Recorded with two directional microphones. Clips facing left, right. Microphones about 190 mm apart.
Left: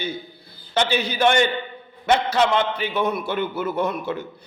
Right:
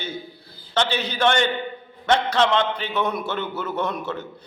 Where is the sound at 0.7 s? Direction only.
10° left (ahead or behind).